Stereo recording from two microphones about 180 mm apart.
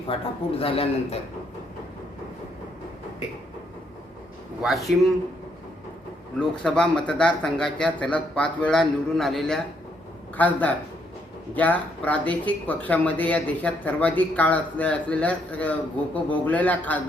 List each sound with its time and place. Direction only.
0.1 s a man's voice: 30° left (ahead or behind)
4.6 s speech: centre (ahead or behind)
6.6 s speech: 5° left (ahead or behind)